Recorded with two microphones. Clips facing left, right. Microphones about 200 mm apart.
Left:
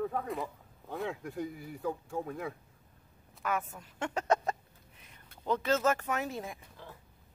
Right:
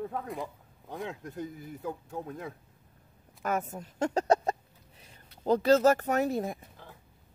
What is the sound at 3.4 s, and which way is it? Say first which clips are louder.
Speech: right 3 dB; 40° right (ahead or behind).